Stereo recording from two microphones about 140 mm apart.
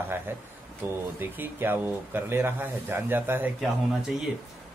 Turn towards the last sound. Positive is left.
turn(degrees=-5)  # may be behind; listen again after turning